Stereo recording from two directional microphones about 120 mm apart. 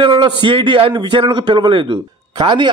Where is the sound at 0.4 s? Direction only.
40° right (ahead or behind).